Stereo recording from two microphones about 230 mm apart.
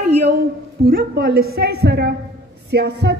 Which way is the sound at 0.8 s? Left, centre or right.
Right.